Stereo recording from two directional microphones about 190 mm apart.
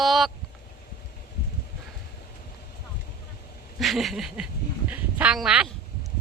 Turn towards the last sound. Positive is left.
turn(degrees=-5)  # may be behind; listen again after turning